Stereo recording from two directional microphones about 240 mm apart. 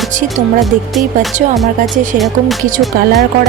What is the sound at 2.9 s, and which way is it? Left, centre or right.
Speech, right.